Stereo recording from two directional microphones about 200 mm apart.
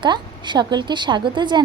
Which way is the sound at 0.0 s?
20° right (ahead or behind).